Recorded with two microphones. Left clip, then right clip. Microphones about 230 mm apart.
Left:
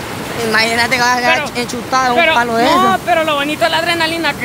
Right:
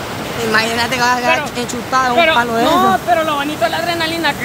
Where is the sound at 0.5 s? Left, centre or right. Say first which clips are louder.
Left 3 dB; centre.